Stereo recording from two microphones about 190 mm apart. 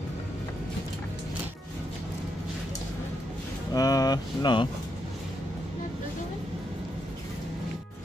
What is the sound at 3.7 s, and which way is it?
Speech, 20° left (ahead or behind).